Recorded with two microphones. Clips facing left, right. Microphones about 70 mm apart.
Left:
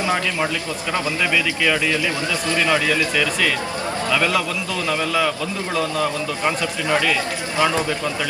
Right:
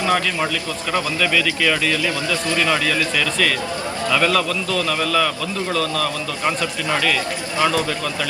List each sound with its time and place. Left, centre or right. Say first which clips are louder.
1.2 s a man's voice: right 1 dB; centre
7.6 s a man's voice: even; left